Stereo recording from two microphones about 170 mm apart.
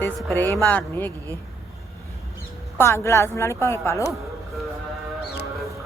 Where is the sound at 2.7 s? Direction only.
15° left (ahead or behind).